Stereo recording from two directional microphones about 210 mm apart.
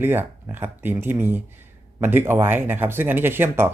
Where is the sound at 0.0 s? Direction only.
10° right (ahead or behind).